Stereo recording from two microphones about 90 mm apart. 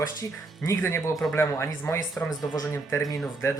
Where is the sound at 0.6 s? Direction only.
30° left (ahead or behind).